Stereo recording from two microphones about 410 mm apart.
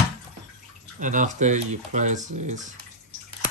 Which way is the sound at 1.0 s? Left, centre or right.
Centre.